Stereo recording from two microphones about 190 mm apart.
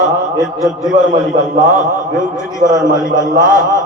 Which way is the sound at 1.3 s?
45° right (ahead or behind).